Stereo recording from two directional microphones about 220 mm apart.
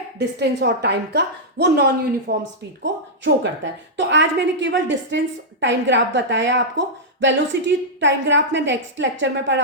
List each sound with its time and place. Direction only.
0.2 s a woman's voice: 50° right (ahead or behind)